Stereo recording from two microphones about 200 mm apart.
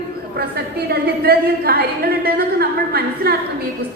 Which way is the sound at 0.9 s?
50° right (ahead or behind).